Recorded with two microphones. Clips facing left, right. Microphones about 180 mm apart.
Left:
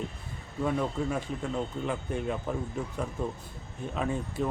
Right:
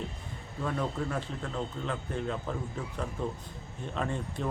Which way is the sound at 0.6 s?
10° left (ahead or behind).